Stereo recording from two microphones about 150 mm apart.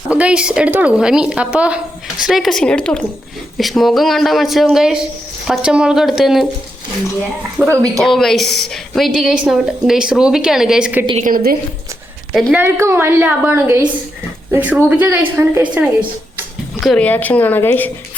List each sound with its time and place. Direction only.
0.1 s a woman's voice: 10° right (ahead or behind)
7.8 s a woman's voice: centre (ahead or behind)
11.2 s a woman's voice: 70° right (ahead or behind)
12.3 s a woman's voice: centre (ahead or behind)
12.8 s speech: 15° right (ahead or behind)
16.8 s a woman's voice: 5° left (ahead or behind)